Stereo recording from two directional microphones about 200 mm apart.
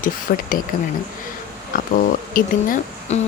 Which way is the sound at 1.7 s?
45° left (ahead or behind).